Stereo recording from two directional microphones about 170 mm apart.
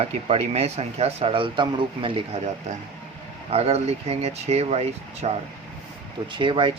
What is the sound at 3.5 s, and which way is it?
Speech, 35° right (ahead or behind).